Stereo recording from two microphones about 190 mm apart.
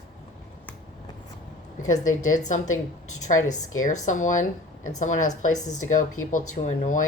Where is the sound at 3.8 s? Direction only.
40° left (ahead or behind).